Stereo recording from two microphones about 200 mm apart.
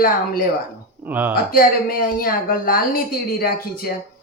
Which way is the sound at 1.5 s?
45° left (ahead or behind).